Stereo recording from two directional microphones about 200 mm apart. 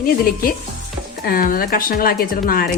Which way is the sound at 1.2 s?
45° left (ahead or behind).